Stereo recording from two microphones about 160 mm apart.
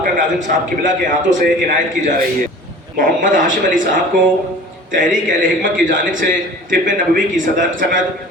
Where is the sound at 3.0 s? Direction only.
55° right (ahead or behind).